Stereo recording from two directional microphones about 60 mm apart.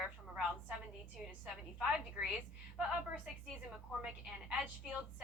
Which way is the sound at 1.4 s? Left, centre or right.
Centre.